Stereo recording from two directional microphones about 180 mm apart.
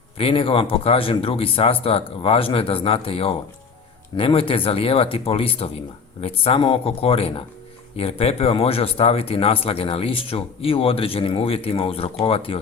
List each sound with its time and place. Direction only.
0.2 s speech: 30° left (ahead or behind)